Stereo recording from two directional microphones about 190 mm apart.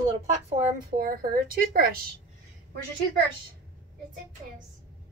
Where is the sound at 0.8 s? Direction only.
50° right (ahead or behind).